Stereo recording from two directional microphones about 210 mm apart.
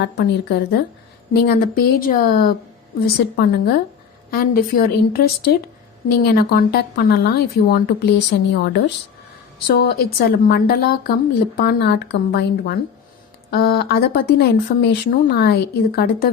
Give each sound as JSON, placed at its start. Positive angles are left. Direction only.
{"t": 0.0, "sound": "speech", "side_deg": 50}